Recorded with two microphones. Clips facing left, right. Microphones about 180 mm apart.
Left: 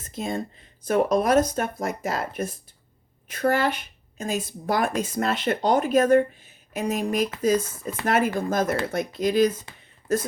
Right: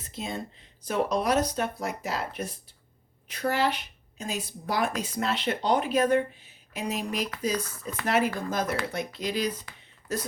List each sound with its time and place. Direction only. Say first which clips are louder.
0.0 s speech: left 6 dB; 50° left (ahead or behind)
7.6 s speech: left 3 dB; 25° left (ahead or behind)
8.0 s speech: left 3 dB; 50° left (ahead or behind)
9.7 s a sound: left 2 dB; 25° left (ahead or behind)
10.1 s speech: left 8 dB; 50° left (ahead or behind)